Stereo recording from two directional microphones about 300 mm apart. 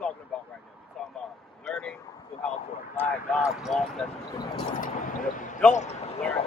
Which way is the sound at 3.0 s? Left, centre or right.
Centre.